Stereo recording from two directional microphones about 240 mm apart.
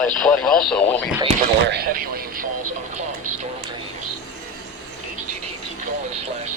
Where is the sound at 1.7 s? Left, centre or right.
Right.